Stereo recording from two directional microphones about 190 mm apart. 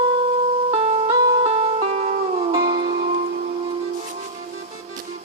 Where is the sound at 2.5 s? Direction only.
20° right (ahead or behind).